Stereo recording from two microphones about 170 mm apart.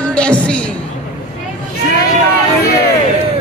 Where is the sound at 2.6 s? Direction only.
70° left (ahead or behind).